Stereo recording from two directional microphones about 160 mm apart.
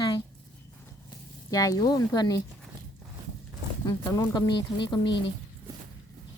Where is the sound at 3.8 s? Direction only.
20° left (ahead or behind).